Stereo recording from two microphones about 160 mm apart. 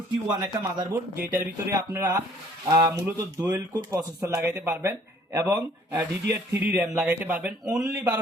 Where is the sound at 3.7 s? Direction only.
25° right (ahead or behind); by 7.8 s 10° right (ahead or behind).